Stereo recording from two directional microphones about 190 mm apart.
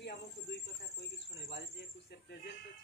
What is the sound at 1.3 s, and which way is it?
Speech, 60° left (ahead or behind).